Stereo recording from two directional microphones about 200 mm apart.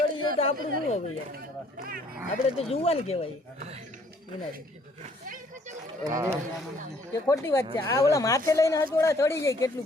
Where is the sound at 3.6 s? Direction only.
30° right (ahead or behind).